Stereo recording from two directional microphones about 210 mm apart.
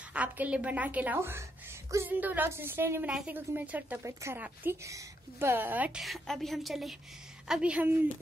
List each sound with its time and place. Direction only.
0.1 s a woman's voice: 5° right (ahead or behind)